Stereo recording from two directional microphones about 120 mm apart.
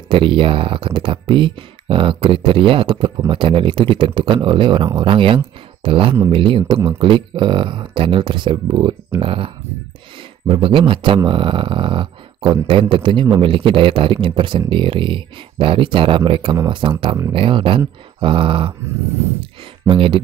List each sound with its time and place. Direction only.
0.1 s speech: 45° right (ahead or behind)
19.9 s speech: 45° right (ahead or behind)